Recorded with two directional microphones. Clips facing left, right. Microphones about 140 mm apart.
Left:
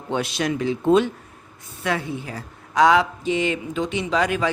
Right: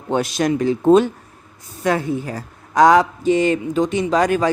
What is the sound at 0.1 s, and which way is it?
A man's voice, 45° right (ahead or behind).